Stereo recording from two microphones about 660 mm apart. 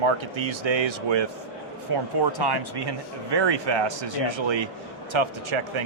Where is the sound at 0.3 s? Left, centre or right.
Right.